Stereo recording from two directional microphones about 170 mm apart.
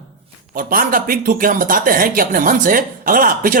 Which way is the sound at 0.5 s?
60° right (ahead or behind).